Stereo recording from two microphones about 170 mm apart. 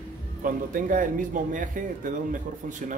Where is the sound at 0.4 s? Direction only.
50° right (ahead or behind).